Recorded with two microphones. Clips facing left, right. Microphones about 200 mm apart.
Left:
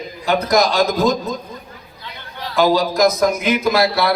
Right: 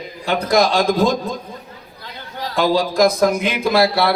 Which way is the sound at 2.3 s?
45° right (ahead or behind).